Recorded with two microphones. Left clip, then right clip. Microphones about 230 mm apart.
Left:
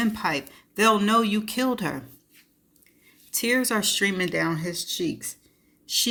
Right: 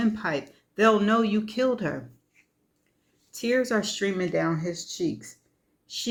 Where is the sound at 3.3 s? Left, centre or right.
Left.